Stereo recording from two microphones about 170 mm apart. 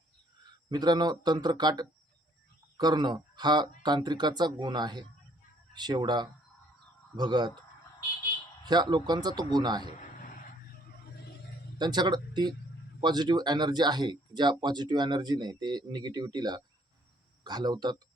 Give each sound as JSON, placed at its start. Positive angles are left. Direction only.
{"t": 0.7, "sound": "speech", "side_deg": -25}
{"t": 8.6, "sound": "speech", "side_deg": -25}
{"t": 11.8, "sound": "speech", "side_deg": -25}